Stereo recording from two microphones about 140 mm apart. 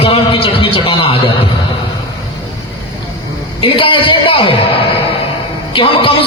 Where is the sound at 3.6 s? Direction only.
40° left (ahead or behind).